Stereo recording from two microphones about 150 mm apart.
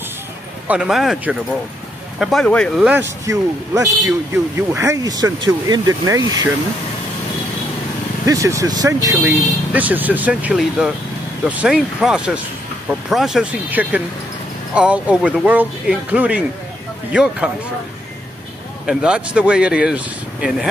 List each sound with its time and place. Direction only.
0.7 s speech: 5° right (ahead or behind)
2.9 s speech: 20° right (ahead or behind)
8.3 s speech: 20° right (ahead or behind)
9.2 s speech: 10° right (ahead or behind)
18.9 s speech: 5° right (ahead or behind)